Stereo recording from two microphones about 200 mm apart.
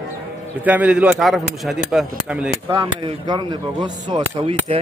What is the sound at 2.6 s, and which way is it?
Speech, 25° right (ahead or behind).